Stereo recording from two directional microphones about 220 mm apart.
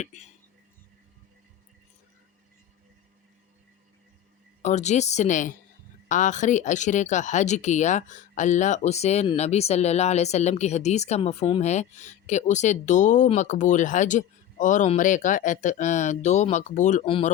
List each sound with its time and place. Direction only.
0.0 s speech: 30° left (ahead or behind)
4.6 s speech: 30° left (ahead or behind)